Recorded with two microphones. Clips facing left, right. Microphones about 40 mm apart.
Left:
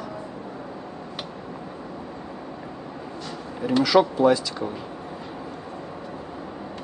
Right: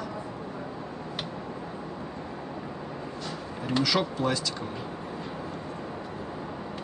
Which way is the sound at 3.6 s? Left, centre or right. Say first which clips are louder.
Left 8 dB; centre.